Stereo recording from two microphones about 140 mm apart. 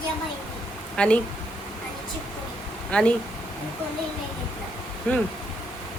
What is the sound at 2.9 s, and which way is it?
Speech, 5° left (ahead or behind).